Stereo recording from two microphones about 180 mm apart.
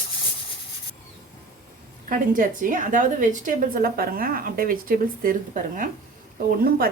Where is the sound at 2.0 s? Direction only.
50° right (ahead or behind).